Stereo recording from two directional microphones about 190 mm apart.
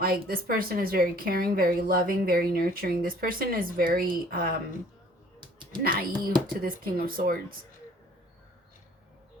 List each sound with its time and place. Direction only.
0.0 s a woman's voice: 50° right (ahead or behind)
5.4 s typing: 25° right (ahead or behind)
5.8 s a woman's voice: 50° right (ahead or behind)